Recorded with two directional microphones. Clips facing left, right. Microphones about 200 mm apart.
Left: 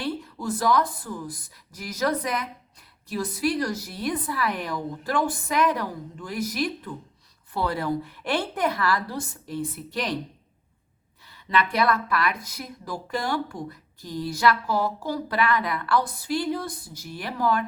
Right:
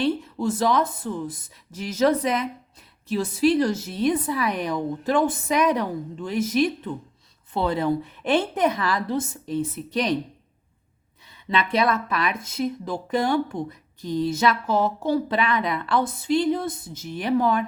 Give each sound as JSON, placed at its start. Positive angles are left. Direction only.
{"t": 0.0, "sound": "speech", "side_deg": -25}
{"t": 11.3, "sound": "speech", "side_deg": -20}